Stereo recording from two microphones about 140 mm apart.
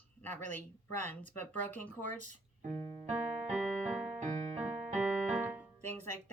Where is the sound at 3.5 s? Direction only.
5° right (ahead or behind).